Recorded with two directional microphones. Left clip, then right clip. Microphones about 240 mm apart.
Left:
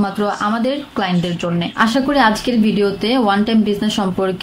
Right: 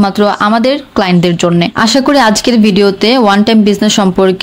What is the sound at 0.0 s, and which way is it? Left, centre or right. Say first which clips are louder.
Speech: right 9 dB; right.